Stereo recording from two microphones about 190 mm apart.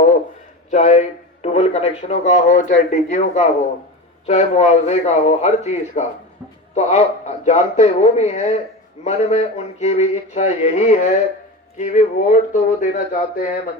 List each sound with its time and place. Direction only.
0.7 s speech: 40° left (ahead or behind)